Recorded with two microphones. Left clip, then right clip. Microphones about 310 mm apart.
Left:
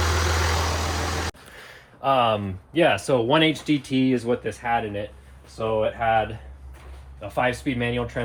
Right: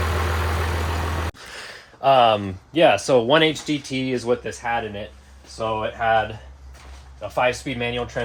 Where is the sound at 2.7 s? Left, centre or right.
Centre.